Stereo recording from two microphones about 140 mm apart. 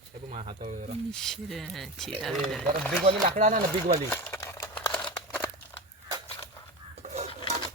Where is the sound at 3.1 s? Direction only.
50° right (ahead or behind); by 4.0 s 65° right (ahead or behind).